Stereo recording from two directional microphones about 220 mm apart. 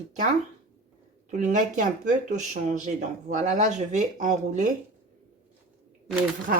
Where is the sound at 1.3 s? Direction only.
35° right (ahead or behind).